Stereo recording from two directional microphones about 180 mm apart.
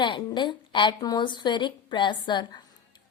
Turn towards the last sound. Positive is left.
turn(degrees=25)  # may be behind; listen again after turning